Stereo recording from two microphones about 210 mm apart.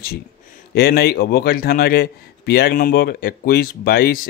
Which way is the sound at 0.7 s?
50° left (ahead or behind).